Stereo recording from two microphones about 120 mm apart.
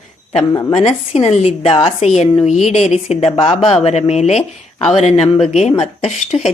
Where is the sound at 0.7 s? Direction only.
75° left (ahead or behind).